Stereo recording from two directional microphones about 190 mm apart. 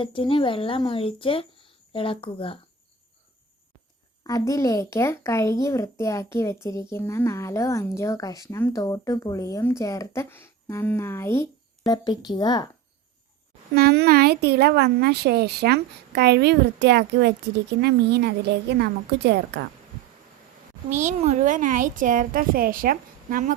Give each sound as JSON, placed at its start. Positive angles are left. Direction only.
{"t": 0.0, "sound": "speech", "side_deg": 25}
{"t": 4.2, "sound": "speech", "side_deg": 15}
{"t": 13.7, "sound": "speech", "side_deg": -55}
{"t": 20.9, "sound": "a woman's voice", "side_deg": -40}